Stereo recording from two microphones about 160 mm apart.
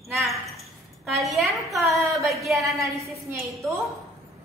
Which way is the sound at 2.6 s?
20° right (ahead or behind).